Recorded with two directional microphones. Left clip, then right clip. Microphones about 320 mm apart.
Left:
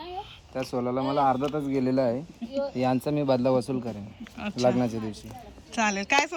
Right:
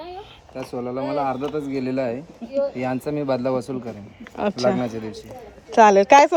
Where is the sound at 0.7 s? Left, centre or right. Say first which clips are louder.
Right 2 dB; left.